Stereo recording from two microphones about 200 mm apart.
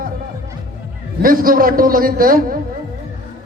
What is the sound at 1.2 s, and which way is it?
A man's voice, 45° right (ahead or behind).